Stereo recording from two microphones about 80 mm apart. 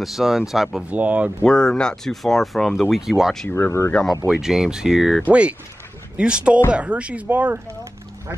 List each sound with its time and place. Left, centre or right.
0.0 s speech: centre
0.8 s speech: centre
1.4 s speech: centre
3.4 s speech: left
4.3 s speech: centre
5.3 s speech: centre